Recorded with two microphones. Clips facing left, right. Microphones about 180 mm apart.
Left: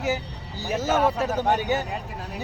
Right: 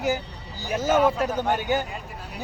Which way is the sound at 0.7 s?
25° left (ahead or behind).